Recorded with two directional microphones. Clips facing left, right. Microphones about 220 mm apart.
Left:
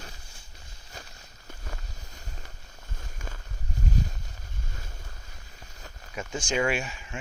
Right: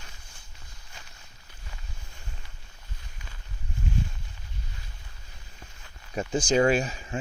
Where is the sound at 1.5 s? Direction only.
45° left (ahead or behind).